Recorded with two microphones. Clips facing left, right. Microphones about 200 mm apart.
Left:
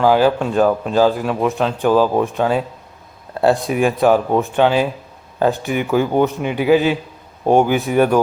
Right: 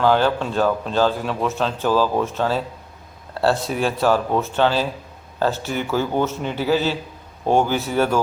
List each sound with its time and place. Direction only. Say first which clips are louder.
0.0 s speech: left 4 dB; 5° left (ahead or behind)